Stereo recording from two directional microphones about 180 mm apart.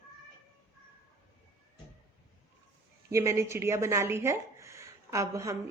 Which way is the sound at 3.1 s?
15° right (ahead or behind).